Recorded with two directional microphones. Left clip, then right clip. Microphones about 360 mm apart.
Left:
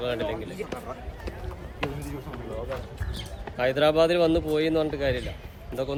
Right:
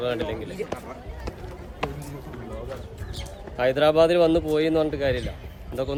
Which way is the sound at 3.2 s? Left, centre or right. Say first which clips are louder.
Right 2 dB; centre.